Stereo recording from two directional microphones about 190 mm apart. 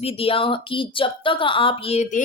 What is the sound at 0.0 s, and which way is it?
A woman's voice, 30° left (ahead or behind).